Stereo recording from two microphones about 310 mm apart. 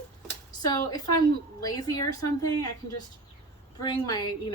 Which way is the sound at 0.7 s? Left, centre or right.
Centre.